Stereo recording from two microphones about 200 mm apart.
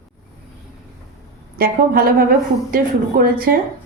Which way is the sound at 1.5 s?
45° right (ahead or behind).